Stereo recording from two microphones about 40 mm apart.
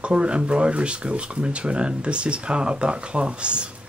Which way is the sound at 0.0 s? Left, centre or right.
Right.